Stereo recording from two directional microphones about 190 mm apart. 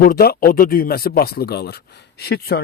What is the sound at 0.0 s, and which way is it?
Speech, 50° left (ahead or behind).